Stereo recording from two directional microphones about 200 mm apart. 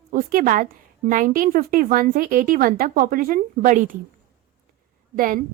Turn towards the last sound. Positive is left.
turn(degrees=-45)  # may be behind; listen again after turning